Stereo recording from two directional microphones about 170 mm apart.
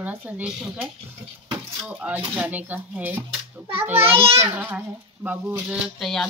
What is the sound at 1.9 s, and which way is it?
Speech, 10° right (ahead or behind).